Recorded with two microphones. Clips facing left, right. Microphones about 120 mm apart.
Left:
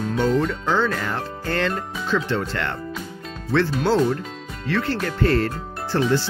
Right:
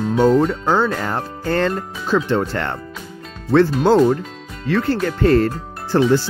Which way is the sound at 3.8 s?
45° right (ahead or behind).